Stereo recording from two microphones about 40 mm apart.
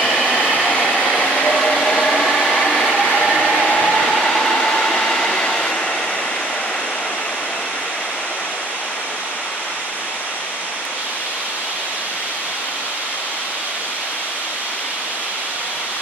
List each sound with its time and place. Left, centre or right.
0.0 s vehicle: centre
0.5 s train: centre
1.5 s a sound: centre
3.5 s train: centre